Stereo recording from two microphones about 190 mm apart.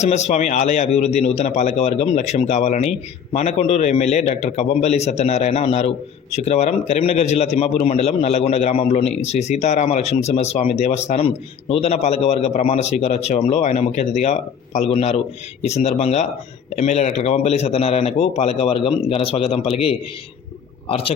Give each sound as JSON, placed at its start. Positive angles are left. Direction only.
{"t": 0.0, "sound": "a man's voice", "side_deg": 35}
{"t": 20.8, "sound": "a man's voice", "side_deg": 30}